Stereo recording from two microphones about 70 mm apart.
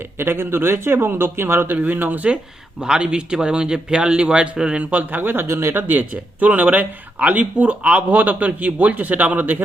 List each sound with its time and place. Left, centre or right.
0.2 s a man's voice: right